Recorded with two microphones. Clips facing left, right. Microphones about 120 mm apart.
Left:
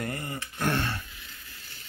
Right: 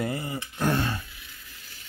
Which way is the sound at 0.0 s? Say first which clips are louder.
Right 4 dB; 15° right (ahead or behind).